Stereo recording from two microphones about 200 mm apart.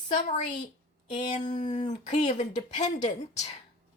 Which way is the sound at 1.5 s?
35° left (ahead or behind).